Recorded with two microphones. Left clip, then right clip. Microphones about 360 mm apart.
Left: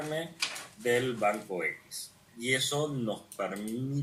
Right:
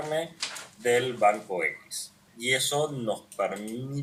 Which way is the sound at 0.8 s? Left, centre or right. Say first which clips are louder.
Right 5 dB; right.